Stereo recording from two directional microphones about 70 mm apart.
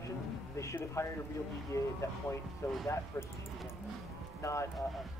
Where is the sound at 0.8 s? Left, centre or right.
Left.